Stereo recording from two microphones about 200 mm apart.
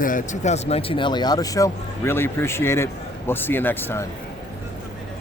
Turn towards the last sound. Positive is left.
turn(degrees=10)  # may be behind; listen again after turning